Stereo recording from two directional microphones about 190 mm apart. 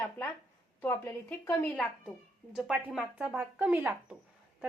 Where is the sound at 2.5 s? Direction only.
5° right (ahead or behind).